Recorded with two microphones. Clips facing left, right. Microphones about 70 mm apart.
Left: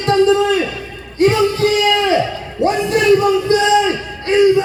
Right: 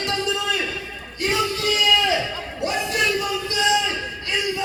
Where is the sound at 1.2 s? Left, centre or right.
Left.